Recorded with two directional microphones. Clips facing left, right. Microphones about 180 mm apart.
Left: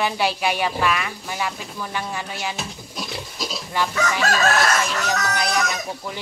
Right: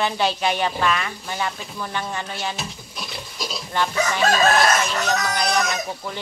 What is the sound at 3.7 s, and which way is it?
Speech, 10° left (ahead or behind).